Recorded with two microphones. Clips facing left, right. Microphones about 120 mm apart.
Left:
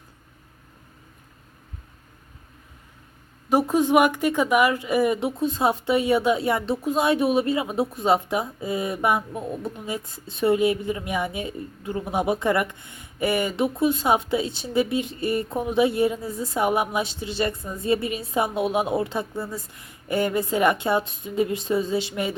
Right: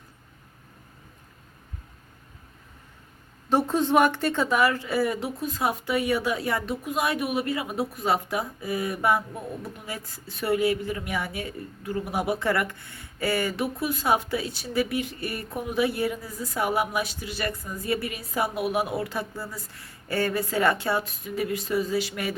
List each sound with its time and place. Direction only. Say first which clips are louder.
3.5 s speech: left 3 dB; 10° left (ahead or behind)